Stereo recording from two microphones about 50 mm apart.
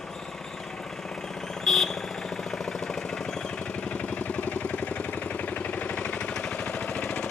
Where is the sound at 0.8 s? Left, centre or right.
Centre.